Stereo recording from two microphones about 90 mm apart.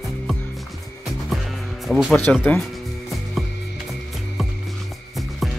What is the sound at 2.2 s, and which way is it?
Speech, 20° left (ahead or behind).